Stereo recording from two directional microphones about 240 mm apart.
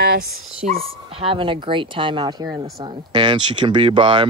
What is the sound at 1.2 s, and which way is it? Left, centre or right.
Speech, right.